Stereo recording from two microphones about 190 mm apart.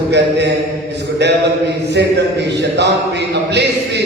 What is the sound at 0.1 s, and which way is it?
Speech, 65° right (ahead or behind).